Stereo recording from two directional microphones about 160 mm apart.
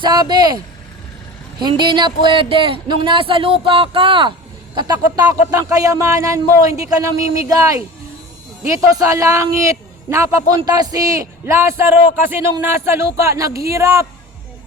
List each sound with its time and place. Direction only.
0.0 s a man's voice: 25° right (ahead or behind)